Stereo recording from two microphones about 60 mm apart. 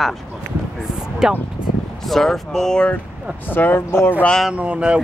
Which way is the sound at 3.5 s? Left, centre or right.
Left.